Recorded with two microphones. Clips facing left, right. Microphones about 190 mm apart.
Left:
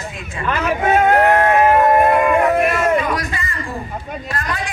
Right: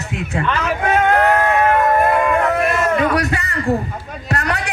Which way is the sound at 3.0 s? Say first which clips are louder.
Right 3 dB; 70° right (ahead or behind).